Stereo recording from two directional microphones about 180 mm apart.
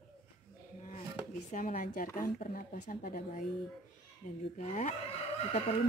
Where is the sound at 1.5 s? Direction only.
45° left (ahead or behind).